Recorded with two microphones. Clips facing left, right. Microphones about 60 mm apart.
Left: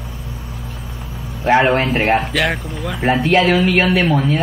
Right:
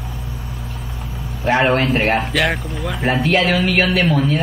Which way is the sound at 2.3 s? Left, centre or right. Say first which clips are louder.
Even; centre.